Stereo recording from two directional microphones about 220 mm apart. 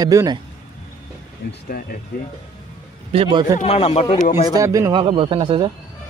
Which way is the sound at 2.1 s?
45° left (ahead or behind).